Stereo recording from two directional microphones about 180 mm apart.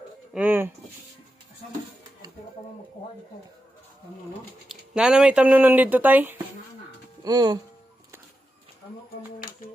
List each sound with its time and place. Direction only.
0.3 s speech: 10° right (ahead or behind)
4.7 s speech: 5° right (ahead or behind)
7.3 s speech: 20° right (ahead or behind)